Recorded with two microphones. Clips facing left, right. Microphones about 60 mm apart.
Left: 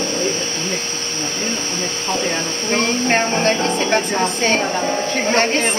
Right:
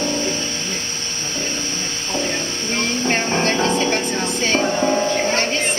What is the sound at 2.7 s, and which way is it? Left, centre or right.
Speech, left.